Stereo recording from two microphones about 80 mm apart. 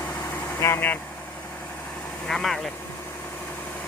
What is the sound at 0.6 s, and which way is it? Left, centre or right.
Speech, left.